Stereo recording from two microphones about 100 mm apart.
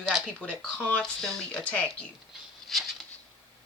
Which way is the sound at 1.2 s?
5° left (ahead or behind).